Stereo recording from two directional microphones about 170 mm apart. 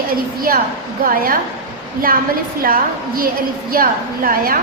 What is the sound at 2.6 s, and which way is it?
A woman's voice, 60° right (ahead or behind).